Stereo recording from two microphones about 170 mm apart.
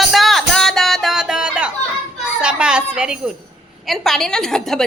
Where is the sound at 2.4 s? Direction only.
5° right (ahead or behind).